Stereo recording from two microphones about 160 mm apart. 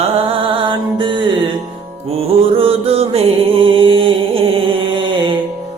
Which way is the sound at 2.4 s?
35° right (ahead or behind).